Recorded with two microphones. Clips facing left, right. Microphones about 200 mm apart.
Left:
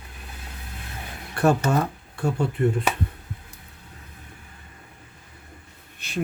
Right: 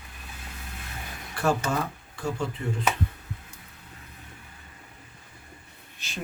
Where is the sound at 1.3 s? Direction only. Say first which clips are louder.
Left 5 dB; 60° left (ahead or behind).